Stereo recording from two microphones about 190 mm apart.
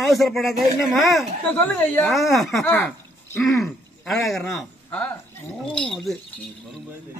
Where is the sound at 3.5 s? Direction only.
Centre (ahead or behind).